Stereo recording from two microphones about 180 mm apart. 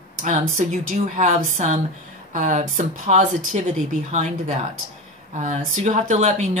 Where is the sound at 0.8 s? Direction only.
45° right (ahead or behind).